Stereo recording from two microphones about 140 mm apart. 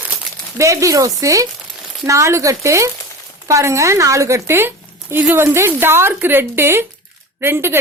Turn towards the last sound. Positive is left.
turn(degrees=-15)  # may be behind; listen again after turning